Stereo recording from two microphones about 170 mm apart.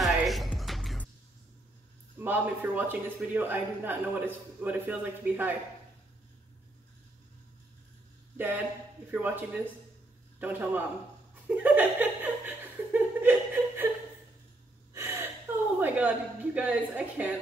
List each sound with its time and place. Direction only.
0.0 s music: centre (ahead or behind)
2.1 s a man's voice: 10° right (ahead or behind)
8.4 s a man's voice: 10° right (ahead or behind)
11.4 s laughter: 10° right (ahead or behind)
15.0 s gasp: 15° right (ahead or behind)
15.8 s a woman's voice: 10° right (ahead or behind)